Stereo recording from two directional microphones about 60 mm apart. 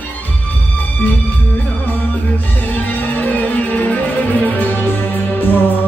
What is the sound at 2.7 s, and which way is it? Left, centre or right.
Music, left.